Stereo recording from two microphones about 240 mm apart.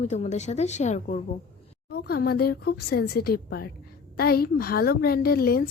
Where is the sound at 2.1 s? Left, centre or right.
Left.